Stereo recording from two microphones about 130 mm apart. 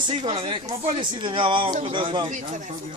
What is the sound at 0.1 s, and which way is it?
Speech, 40° right (ahead or behind).